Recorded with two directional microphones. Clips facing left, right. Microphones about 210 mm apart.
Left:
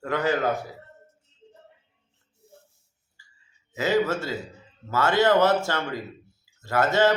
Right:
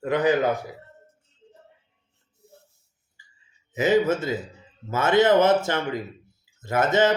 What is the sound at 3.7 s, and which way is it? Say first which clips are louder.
Speech: right 3 dB; 20° right (ahead or behind).